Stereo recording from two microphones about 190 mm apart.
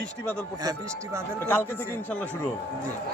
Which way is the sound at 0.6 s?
15° right (ahead or behind).